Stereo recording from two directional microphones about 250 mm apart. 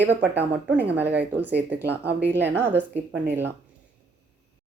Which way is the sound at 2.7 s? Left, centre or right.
Centre.